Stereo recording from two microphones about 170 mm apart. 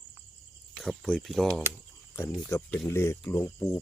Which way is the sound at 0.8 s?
Centre (ahead or behind).